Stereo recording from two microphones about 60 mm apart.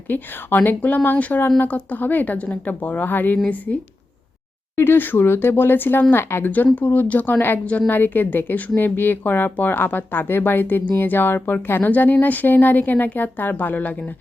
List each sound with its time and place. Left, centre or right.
0.1 s a woman's voice: left
4.8 s a woman's voice: left